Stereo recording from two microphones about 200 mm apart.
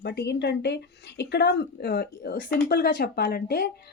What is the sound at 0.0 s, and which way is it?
Speech, 55° left (ahead or behind).